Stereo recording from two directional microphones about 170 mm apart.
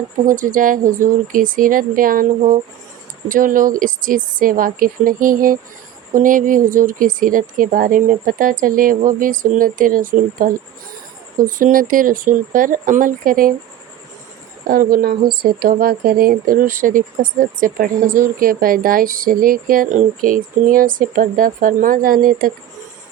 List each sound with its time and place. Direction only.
0.3 s speech: 50° right (ahead or behind)
14.7 s speech: 55° right (ahead or behind)